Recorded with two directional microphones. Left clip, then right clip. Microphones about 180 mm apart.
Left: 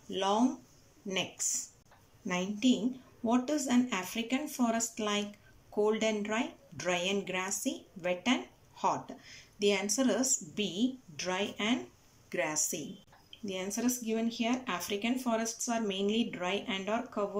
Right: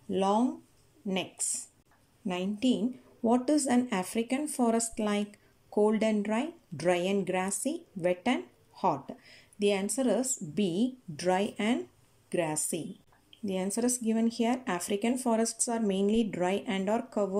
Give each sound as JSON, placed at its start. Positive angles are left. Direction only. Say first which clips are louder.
{"t": 0.1, "sound": "speech", "louder": "right 2 dB", "side_deg": -25}